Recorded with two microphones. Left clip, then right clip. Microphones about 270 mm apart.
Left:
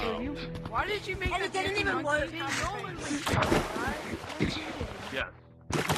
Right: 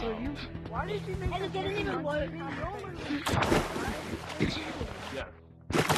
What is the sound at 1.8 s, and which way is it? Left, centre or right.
Speech, left.